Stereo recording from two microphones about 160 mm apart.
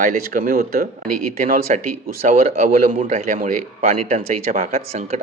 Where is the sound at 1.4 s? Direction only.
60° right (ahead or behind).